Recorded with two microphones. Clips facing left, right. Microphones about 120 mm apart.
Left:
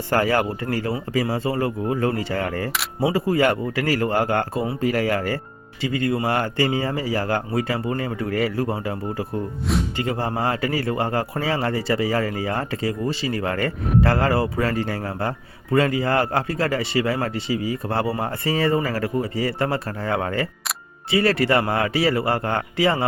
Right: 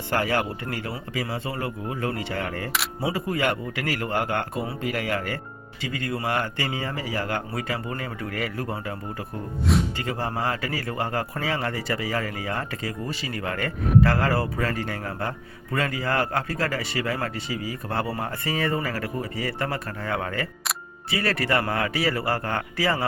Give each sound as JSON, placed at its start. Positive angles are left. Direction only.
{"t": 0.1, "sound": "speech", "side_deg": 40}
{"t": 3.0, "sound": "a man's voice", "side_deg": 25}